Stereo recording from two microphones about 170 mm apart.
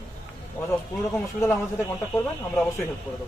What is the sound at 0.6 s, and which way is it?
Speech, 15° left (ahead or behind).